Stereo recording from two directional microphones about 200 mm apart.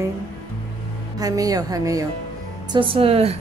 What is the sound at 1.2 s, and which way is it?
A woman's voice, 20° right (ahead or behind).